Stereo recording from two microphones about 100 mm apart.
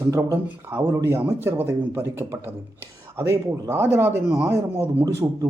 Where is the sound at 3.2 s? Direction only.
35° right (ahead or behind).